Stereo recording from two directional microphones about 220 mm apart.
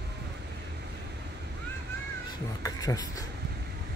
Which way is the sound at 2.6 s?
15° left (ahead or behind).